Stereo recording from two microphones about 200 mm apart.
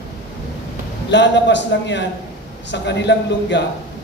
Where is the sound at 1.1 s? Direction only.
60° left (ahead or behind).